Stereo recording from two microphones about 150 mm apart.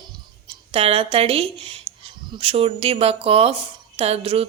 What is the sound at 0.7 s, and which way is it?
Speech, 40° right (ahead or behind).